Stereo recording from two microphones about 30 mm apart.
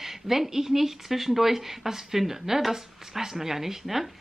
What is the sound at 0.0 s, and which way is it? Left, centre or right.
Speech, centre.